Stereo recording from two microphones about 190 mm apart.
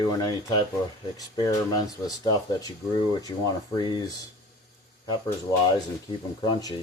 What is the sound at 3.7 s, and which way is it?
Speech, 20° left (ahead or behind).